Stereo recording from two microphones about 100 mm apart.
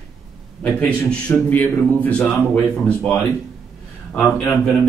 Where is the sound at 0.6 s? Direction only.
10° left (ahead or behind).